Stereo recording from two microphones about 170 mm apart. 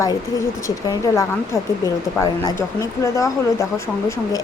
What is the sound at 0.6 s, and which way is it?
Speech, 20° left (ahead or behind).